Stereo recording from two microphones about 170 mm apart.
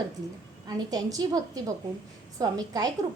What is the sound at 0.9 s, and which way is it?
A woman's voice, 25° right (ahead or behind).